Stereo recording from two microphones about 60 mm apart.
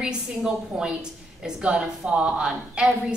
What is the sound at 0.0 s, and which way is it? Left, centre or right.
A woman's voice, centre.